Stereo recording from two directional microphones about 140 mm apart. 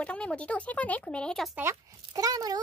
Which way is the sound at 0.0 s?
10° left (ahead or behind).